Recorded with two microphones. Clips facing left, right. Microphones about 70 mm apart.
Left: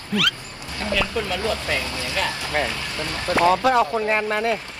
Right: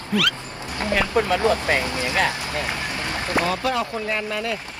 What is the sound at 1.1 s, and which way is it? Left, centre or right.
Speech, right.